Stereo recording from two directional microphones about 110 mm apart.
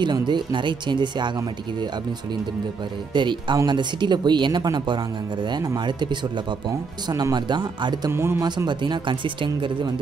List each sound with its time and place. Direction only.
0.0 s speech: 45° right (ahead or behind)
3.1 s speech: 45° right (ahead or behind)
8.1 s a man's voice: 20° right (ahead or behind)
8.4 s speech: 40° right (ahead or behind)